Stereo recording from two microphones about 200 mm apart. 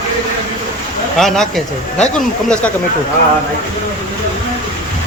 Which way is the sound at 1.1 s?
Centre (ahead or behind).